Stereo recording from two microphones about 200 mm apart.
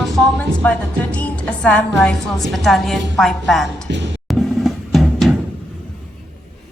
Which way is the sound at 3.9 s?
65° right (ahead or behind).